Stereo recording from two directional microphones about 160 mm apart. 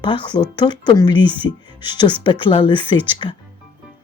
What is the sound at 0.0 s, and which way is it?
Speech, 30° left (ahead or behind).